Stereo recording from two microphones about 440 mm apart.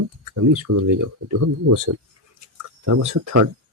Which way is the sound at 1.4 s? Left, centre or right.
Right.